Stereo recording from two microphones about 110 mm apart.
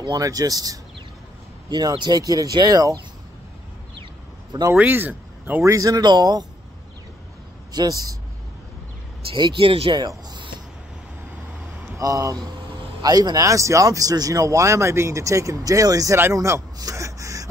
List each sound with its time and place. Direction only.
0.0 s speech: 35° right (ahead or behind)
4.7 s speech: 15° right (ahead or behind)
5.6 s speech: 30° right (ahead or behind)
7.7 s speech: 40° right (ahead or behind)
9.3 s speech: 50° right (ahead or behind)
9.9 s speech: 40° right (ahead or behind)
12.0 s speech: 30° right (ahead or behind)
16.2 s a sound: 25° right (ahead or behind)